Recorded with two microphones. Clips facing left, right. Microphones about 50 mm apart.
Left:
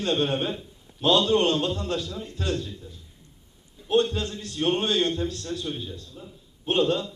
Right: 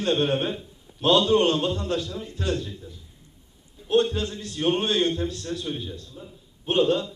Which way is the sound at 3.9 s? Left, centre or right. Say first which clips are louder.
Right 1 dB; centre.